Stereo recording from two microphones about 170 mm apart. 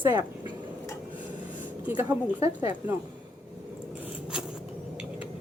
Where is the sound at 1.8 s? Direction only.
10° right (ahead or behind).